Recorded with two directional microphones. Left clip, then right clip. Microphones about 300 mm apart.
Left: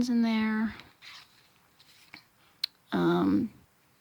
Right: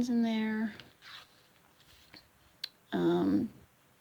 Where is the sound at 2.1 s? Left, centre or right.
Centre.